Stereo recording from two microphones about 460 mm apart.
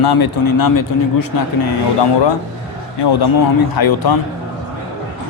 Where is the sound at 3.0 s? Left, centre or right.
Left.